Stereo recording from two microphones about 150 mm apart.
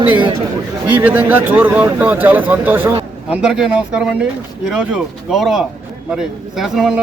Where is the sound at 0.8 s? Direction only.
10° right (ahead or behind).